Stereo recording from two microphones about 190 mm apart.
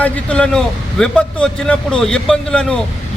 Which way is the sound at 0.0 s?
5° left (ahead or behind).